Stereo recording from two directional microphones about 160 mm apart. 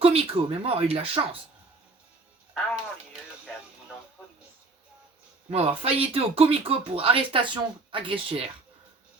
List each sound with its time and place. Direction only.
0.0 s speech: 35° right (ahead or behind)
5.5 s speech: 40° right (ahead or behind)